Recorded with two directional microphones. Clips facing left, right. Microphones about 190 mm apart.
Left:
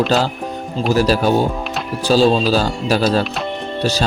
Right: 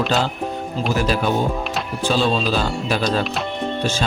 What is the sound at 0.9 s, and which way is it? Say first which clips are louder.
Speech: left 6 dB; 40° left (ahead or behind).